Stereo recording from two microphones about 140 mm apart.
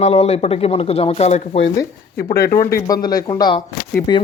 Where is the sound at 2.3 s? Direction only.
90° left.